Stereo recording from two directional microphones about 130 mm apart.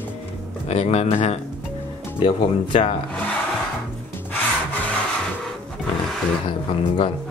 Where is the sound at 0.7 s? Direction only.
55° left (ahead or behind).